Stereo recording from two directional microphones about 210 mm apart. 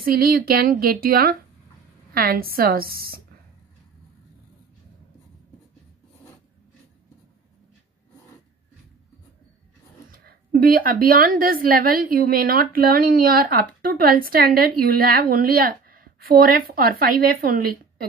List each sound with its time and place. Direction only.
0.0 s a woman's voice: 45° right (ahead or behind)
10.1 s a woman's voice: 45° right (ahead or behind)